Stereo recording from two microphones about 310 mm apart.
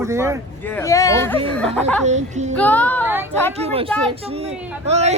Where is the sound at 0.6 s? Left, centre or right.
Centre.